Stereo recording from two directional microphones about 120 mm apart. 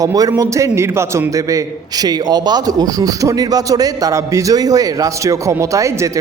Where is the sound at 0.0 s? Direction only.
30° right (ahead or behind).